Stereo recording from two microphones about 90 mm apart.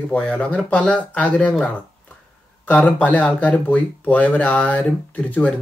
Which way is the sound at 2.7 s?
20° left (ahead or behind).